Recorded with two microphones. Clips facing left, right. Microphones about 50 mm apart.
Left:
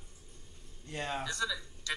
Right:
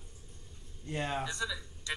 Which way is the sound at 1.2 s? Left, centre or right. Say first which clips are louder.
Left 1 dB; centre.